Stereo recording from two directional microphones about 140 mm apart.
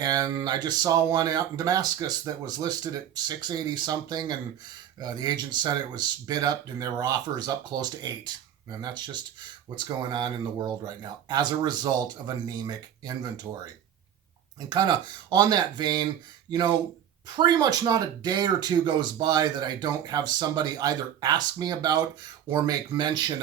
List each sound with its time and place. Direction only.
0.0 s speech: 25° right (ahead or behind)
14.7 s speech: 30° right (ahead or behind)